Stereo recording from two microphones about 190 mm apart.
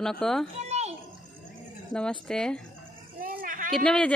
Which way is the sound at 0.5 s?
35° right (ahead or behind).